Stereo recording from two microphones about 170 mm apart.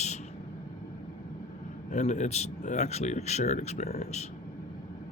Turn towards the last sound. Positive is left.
turn(degrees=40)  # may be behind; listen again after turning